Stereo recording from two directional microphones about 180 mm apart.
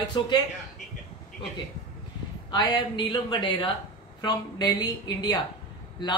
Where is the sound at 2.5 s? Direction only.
25° left (ahead or behind).